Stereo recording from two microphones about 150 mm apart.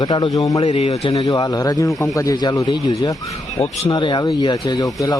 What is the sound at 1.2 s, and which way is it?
A man's voice, 25° left (ahead or behind).